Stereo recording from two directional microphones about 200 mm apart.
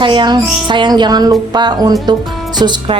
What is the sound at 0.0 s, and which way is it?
A woman's voice, 25° right (ahead or behind).